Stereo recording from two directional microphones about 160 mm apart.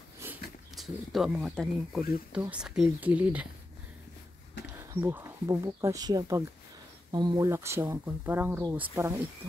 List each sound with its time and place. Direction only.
0.2 s a sound: 15° right (ahead or behind)
0.7 s speech: centre (ahead or behind)
5.0 s speech: 15° right (ahead or behind)